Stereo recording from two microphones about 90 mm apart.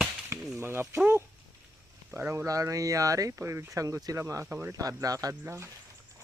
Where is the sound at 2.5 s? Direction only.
40° right (ahead or behind).